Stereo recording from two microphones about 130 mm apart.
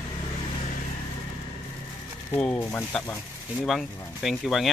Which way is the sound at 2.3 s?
10° left (ahead or behind).